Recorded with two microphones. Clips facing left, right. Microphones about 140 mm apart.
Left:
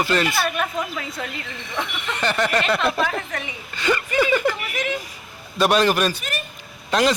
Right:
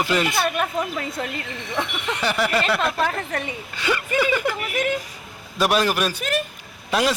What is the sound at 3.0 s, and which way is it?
Speech, 40° right (ahead or behind).